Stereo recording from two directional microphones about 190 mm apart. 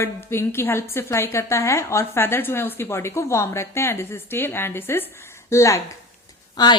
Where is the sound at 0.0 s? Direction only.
15° left (ahead or behind).